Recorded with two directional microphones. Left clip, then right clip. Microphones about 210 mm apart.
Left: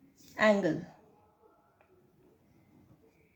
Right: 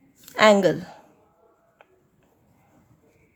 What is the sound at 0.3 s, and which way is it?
Speech, 40° right (ahead or behind).